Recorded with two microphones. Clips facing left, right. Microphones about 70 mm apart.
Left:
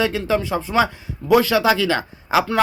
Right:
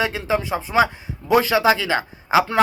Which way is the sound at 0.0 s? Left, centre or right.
Right.